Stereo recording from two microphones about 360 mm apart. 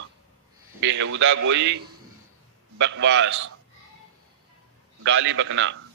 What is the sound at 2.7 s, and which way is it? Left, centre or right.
Speech, right.